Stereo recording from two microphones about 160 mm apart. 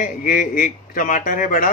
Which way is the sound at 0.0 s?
55° left (ahead or behind).